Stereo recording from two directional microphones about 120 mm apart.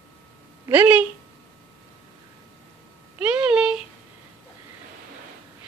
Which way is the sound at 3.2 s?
10° right (ahead or behind).